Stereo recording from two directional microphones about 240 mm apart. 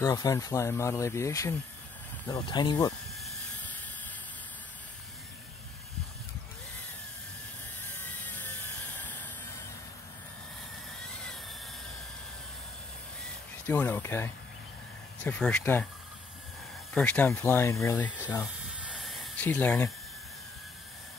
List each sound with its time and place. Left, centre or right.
0.0 s speech: centre
3.2 s hiss: centre
8.0 s a sound: centre
13.7 s speech: centre
16.9 s speech: centre
18.9 s a sound: centre